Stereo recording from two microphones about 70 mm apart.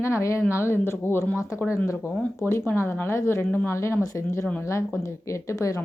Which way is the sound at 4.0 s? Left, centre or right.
Left.